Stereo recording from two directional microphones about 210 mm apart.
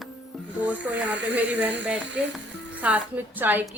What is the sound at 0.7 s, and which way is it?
Speech, 5° right (ahead or behind).